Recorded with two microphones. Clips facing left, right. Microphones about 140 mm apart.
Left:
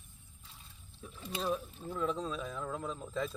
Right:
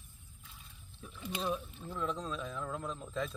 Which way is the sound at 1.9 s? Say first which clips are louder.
Left 3 dB; 5° left (ahead or behind).